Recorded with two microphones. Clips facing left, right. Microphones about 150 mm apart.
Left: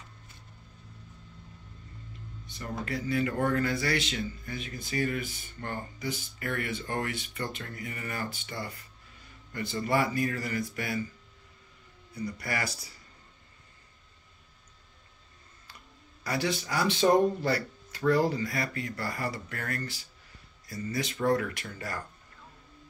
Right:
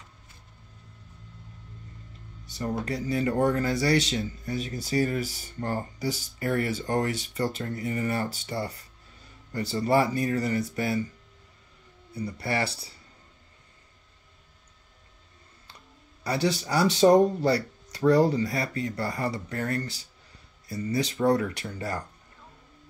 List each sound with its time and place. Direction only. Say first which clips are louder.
2.8 s speech: even; 35° right (ahead or behind)
12.1 s speech: right 4 dB; 30° right (ahead or behind)
16.3 s speech: right 4 dB; 30° right (ahead or behind)